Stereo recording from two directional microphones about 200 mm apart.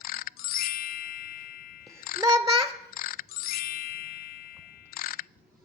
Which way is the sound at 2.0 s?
45° left (ahead or behind).